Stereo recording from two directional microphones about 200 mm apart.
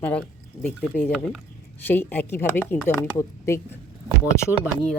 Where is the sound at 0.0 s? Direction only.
5° left (ahead or behind).